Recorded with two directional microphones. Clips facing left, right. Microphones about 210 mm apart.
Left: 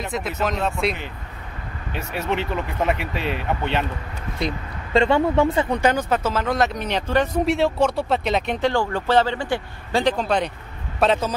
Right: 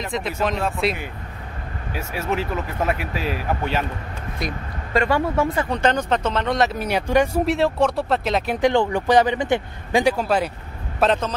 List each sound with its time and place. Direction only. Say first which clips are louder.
0.0 s speech: right 1 dB; 5° left (ahead or behind)
4.4 s speech: left 3 dB; 25° left (ahead or behind)
5.7 s speech: even; 10° left (ahead or behind); by 7.4 s 10° right (ahead or behind)
7.4 s speech: even; centre (ahead or behind)
8.5 s speech: right 3 dB; 15° right (ahead or behind)
11.0 s speech: even; 5° left (ahead or behind)